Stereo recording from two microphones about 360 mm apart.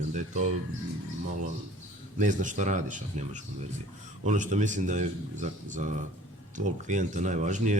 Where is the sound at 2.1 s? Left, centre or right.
Right.